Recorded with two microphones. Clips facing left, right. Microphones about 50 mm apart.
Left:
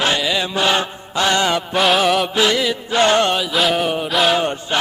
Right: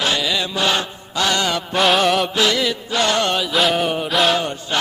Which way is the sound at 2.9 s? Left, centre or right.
Left.